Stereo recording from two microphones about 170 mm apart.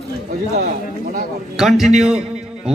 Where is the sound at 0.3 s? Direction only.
65° right (ahead or behind).